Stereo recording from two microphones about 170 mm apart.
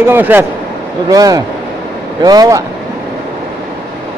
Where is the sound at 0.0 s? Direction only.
10° right (ahead or behind).